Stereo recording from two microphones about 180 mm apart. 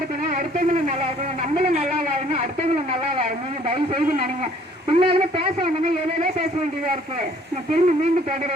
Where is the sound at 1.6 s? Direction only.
45° right (ahead or behind).